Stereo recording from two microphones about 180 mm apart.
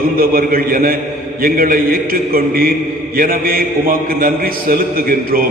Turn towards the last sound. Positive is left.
turn(degrees=-55)  # may be behind; listen again after turning